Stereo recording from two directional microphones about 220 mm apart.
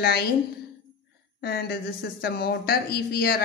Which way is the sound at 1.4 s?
45° left (ahead or behind).